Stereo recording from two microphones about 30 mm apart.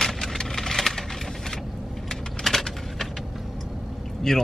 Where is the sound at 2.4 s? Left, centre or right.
Centre.